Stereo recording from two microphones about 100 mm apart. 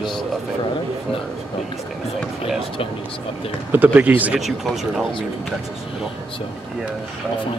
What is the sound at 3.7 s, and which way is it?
Speech, 15° right (ahead or behind).